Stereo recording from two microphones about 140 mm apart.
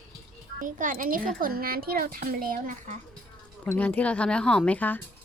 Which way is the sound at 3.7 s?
10° left (ahead or behind).